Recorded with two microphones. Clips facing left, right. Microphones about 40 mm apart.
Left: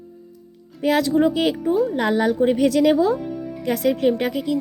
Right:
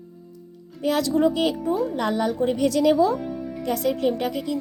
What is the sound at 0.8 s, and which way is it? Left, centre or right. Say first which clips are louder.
Speech: left 4 dB; left.